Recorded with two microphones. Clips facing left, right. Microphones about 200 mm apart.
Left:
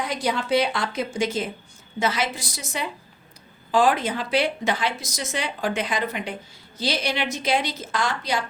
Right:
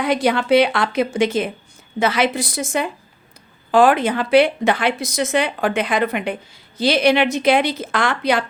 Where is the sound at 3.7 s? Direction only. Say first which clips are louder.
Right 6 dB; 60° right (ahead or behind).